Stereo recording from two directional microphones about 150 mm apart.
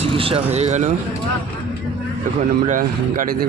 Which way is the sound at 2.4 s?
60° right (ahead or behind).